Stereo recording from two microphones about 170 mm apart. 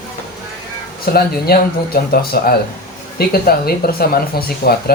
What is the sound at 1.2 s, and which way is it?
Speech, 60° left (ahead or behind).